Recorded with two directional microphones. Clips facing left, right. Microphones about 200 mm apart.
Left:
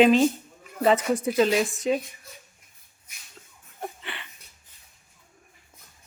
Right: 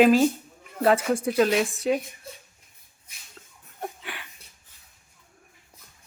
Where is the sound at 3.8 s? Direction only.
5° right (ahead or behind).